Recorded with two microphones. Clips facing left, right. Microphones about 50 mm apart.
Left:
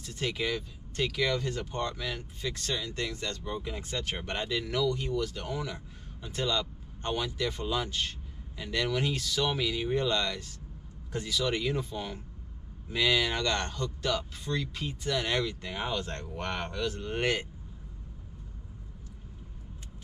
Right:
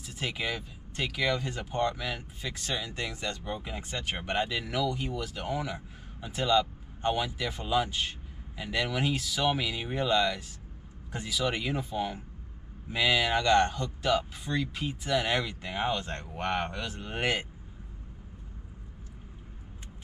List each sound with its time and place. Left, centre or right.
0.0 s speech: centre